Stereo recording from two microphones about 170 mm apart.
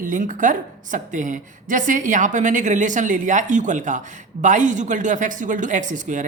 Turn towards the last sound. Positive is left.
turn(degrees=-50)  # may be behind; listen again after turning